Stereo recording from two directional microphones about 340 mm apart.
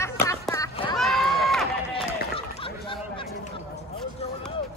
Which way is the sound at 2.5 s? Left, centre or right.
Centre.